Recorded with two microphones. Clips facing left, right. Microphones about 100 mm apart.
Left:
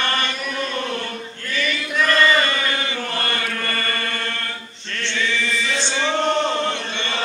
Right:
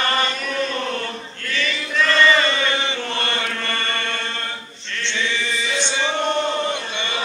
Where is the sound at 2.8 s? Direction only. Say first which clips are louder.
Right 1 dB; 25° right (ahead or behind).